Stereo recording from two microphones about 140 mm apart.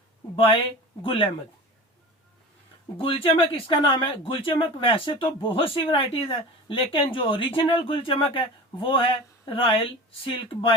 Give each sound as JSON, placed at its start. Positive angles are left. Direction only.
{"t": 0.3, "sound": "speech", "side_deg": 40}
{"t": 3.0, "sound": "speech", "side_deg": 40}